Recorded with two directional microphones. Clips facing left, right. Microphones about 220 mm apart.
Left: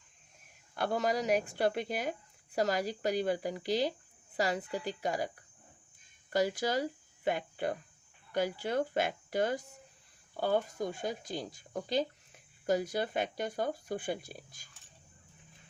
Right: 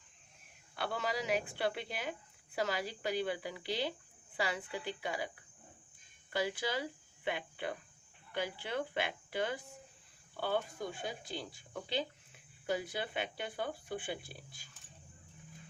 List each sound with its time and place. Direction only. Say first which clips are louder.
0.8 s speech: left 6 dB; 45° left (ahead or behind)
6.3 s speech: left 5 dB; 40° left (ahead or behind)